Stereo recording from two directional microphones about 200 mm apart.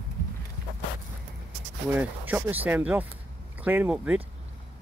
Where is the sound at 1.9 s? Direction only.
10° right (ahead or behind).